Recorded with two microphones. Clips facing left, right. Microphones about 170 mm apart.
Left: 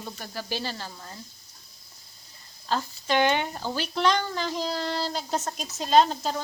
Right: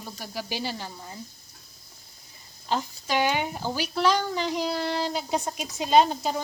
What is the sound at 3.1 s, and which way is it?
Speech, 5° right (ahead or behind).